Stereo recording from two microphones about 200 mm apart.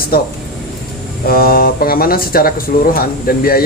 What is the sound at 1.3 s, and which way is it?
Speech, 50° left (ahead or behind).